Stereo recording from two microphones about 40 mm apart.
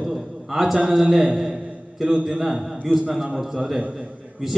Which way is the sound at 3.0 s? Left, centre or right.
Centre.